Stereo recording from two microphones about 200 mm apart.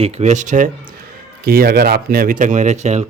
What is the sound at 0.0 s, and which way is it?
Speech, 35° right (ahead or behind).